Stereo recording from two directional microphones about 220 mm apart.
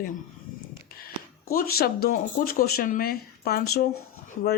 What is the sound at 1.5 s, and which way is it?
Speech, 40° left (ahead or behind).